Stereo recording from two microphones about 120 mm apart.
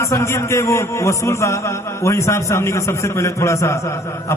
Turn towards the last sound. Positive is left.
turn(degrees=25)  # may be behind; listen again after turning